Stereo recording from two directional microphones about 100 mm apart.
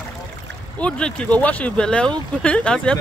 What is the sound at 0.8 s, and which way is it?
Speech, 10° left (ahead or behind).